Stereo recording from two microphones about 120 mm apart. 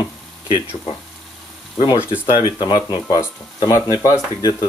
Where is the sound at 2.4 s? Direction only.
35° left (ahead or behind).